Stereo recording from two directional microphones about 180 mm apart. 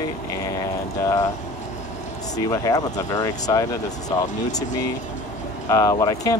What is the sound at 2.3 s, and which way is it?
Speech, 20° left (ahead or behind).